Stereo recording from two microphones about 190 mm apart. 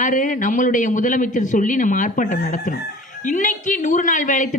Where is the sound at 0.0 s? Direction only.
45° left (ahead or behind).